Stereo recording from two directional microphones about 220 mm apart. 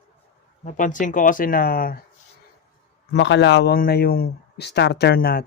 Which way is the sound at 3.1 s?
55° left (ahead or behind).